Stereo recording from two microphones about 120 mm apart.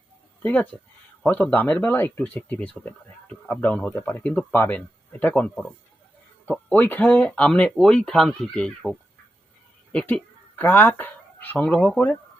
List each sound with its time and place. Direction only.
0.4 s speech: 10° left (ahead or behind)
3.9 s speech: 20° left (ahead or behind)
6.5 s speech: 10° left (ahead or behind)